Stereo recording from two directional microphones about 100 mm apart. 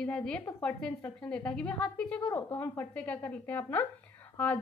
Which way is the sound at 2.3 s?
20° left (ahead or behind).